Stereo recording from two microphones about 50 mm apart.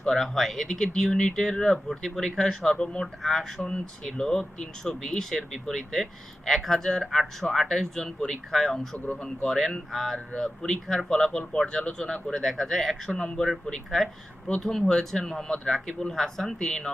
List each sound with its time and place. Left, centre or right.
0.0 s speech: centre
3.2 s speech: centre
3.6 s speech: centre
14.6 s speech: centre